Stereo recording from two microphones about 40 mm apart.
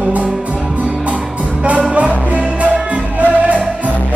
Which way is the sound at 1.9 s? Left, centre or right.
Right.